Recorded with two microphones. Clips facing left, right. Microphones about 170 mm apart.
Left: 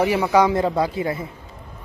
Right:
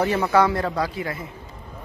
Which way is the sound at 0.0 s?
10° left (ahead or behind).